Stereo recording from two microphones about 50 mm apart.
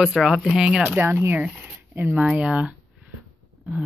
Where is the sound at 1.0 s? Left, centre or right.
Right.